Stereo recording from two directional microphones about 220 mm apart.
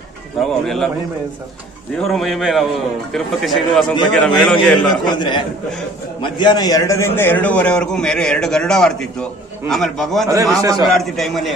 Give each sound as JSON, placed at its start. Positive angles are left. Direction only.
{"t": 0.4, "sound": "a man's voice", "side_deg": 0}
{"t": 2.0, "sound": "a man's voice", "side_deg": 0}
{"t": 5.0, "sound": "a man's voice", "side_deg": 20}
{"t": 10.2, "sound": "a man's voice", "side_deg": -15}
{"t": 10.9, "sound": "a man's voice", "side_deg": 0}